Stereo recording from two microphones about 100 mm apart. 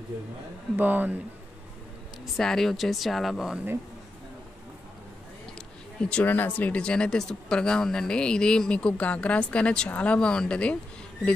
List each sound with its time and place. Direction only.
0.7 s speech: 15° right (ahead or behind)
2.3 s speech: 5° left (ahead or behind)
5.9 s speech: 10° left (ahead or behind)